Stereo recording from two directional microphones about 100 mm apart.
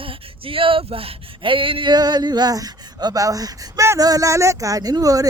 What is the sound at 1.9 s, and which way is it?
Speech, 45° right (ahead or behind).